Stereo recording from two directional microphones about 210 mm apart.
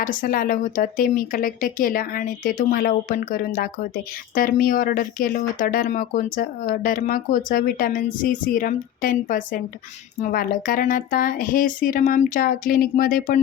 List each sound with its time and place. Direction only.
0.0 s a woman's voice: 40° left (ahead or behind)